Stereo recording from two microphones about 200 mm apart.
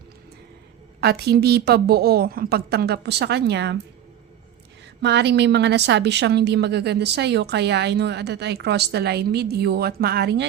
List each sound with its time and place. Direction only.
1.0 s a woman's voice: 55° right (ahead or behind)
5.0 s a woman's voice: 60° right (ahead or behind)